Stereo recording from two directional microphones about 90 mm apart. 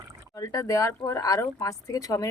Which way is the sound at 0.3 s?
40° left (ahead or behind).